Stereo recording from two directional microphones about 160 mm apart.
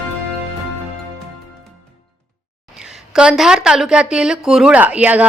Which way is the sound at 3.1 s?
5° right (ahead or behind).